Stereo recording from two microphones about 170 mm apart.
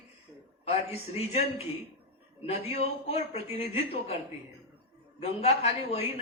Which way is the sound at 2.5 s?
40° left (ahead or behind).